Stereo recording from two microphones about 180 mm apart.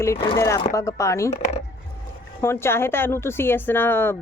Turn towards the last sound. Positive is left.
turn(degrees=10)  # may be behind; listen again after turning